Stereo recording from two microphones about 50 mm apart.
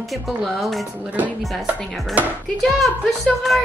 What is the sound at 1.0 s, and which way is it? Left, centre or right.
Speech, right.